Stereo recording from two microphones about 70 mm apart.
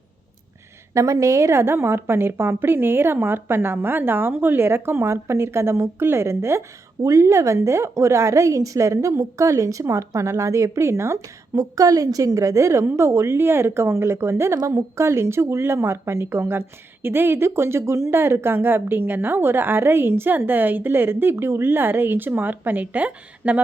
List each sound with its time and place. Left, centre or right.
0.9 s a woman's voice: right
11.5 s a woman's voice: right